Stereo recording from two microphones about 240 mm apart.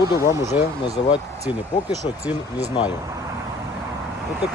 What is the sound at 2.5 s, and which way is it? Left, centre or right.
Speech, centre.